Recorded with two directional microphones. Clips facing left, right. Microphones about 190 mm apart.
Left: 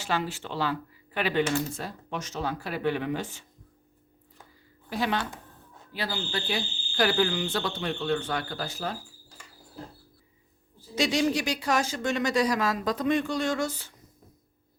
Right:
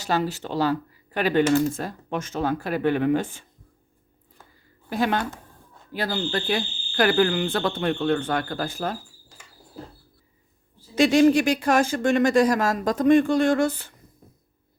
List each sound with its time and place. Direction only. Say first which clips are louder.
0.0 s speech: right 5 dB; 40° right (ahead or behind)
4.9 s speech: right 5 dB; 50° right (ahead or behind)
10.9 s speech: right 9 dB; 55° right (ahead or behind)